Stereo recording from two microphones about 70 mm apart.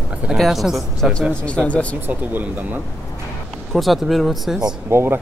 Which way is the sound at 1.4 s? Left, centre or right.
Centre.